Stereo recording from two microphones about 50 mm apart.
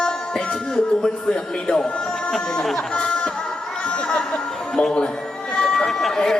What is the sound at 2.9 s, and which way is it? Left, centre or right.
Music, centre.